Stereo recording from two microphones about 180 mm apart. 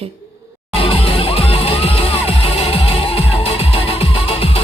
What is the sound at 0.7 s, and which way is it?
Music, 30° left (ahead or behind).